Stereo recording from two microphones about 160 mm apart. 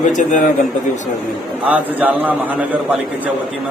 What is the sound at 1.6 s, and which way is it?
A man's voice, 10° right (ahead or behind).